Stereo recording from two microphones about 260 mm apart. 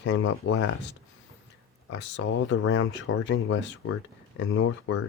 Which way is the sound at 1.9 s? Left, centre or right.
Left.